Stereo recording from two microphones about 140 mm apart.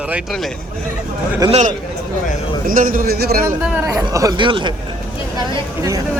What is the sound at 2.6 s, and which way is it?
Speech, 80° right.